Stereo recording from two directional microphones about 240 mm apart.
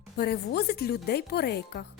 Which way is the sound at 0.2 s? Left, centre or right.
Left.